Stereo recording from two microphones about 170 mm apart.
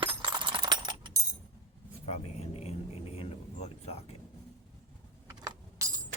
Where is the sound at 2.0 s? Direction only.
40° left (ahead or behind).